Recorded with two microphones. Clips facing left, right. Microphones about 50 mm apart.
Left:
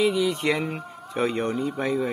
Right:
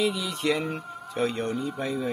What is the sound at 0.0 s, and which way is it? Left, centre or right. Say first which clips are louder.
Speech: left 4 dB; left.